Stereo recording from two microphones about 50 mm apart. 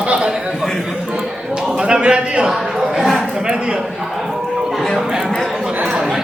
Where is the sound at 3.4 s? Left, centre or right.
Centre.